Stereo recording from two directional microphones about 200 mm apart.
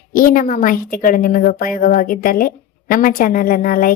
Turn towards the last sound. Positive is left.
turn(degrees=45)  # may be behind; listen again after turning